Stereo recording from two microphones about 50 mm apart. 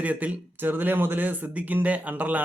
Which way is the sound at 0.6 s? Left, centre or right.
Right.